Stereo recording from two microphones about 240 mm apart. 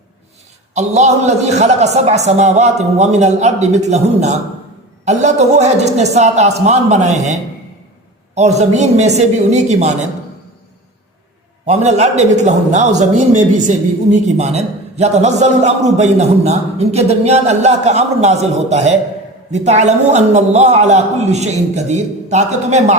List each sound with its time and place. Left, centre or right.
0.7 s a man's voice: right
8.4 s a man's voice: right
11.6 s a man's voice: right